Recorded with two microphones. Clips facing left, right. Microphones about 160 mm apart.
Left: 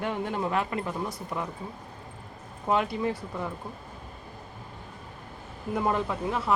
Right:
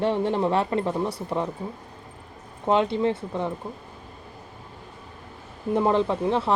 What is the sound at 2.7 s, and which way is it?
Speech, 25° right (ahead or behind).